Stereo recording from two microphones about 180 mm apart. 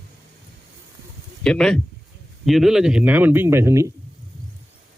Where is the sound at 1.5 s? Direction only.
5° left (ahead or behind); by 3.9 s 15° right (ahead or behind).